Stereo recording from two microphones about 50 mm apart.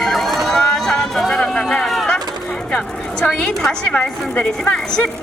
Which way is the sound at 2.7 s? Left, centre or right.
Centre.